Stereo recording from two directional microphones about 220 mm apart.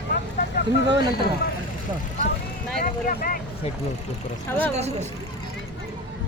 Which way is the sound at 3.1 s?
40° left (ahead or behind).